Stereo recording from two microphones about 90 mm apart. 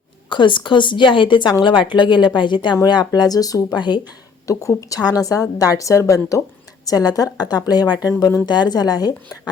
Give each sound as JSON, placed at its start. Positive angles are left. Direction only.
{"t": 0.3, "sound": "speech", "side_deg": 60}
{"t": 4.4, "sound": "a woman's voice", "side_deg": 40}
{"t": 8.0, "sound": "a woman's voice", "side_deg": 35}
{"t": 8.4, "sound": "speech", "side_deg": 50}